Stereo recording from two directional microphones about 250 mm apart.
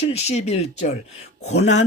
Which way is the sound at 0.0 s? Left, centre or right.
Left.